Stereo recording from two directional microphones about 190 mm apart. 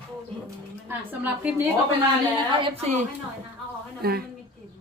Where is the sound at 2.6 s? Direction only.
35° right (ahead or behind).